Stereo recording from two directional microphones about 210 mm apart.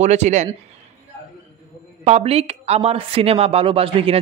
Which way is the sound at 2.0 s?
30° right (ahead or behind).